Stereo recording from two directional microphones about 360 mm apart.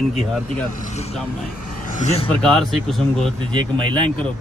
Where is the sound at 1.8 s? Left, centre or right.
Centre.